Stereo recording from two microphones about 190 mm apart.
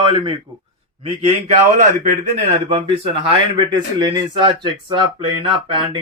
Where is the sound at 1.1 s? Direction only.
30° right (ahead or behind).